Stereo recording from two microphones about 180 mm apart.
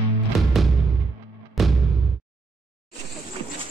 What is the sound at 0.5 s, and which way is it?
Music, centre (ahead or behind).